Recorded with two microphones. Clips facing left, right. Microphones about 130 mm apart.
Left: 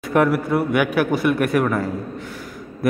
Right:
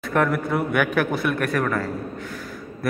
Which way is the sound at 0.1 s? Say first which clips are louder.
Left 4 dB; 10° left (ahead or behind).